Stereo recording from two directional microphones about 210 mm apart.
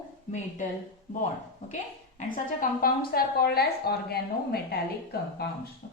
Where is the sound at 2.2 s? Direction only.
40° left (ahead or behind).